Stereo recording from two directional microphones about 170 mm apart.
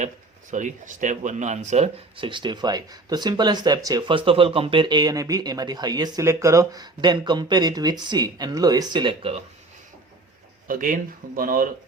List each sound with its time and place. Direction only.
0.5 s speech: 45° right (ahead or behind); by 9.4 s 30° right (ahead or behind)
10.7 s speech: 50° right (ahead or behind)